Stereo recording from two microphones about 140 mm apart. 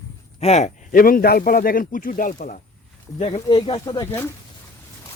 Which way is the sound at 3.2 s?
45° left (ahead or behind).